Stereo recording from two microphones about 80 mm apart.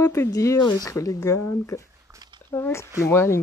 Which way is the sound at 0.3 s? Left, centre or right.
Left.